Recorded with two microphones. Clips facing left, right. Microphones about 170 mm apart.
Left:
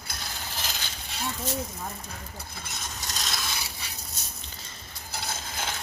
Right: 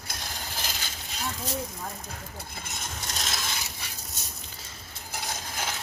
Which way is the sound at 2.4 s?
50° right (ahead or behind).